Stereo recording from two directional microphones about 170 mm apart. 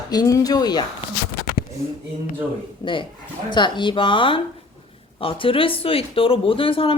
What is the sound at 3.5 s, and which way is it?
Speech, 25° left (ahead or behind).